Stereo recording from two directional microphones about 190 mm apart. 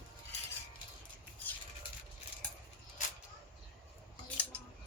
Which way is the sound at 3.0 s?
40° left (ahead or behind).